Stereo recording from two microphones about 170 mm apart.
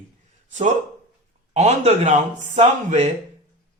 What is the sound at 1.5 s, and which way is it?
A man's voice, 40° right (ahead or behind).